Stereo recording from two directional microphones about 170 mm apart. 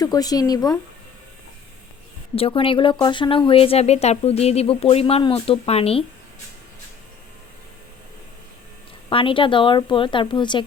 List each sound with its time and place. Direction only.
0.0 s speech: 20° left (ahead or behind)
2.3 s speech: 35° left (ahead or behind)
9.0 s speech: 30° left (ahead or behind)